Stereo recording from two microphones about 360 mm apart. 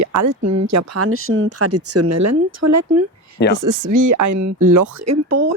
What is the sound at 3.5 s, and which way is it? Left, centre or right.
Speech, right.